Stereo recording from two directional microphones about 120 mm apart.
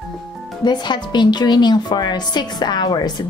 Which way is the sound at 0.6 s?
40° left (ahead or behind).